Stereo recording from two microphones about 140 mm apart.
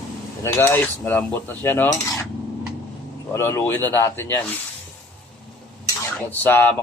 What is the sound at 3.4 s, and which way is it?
Cutlery, 20° left (ahead or behind).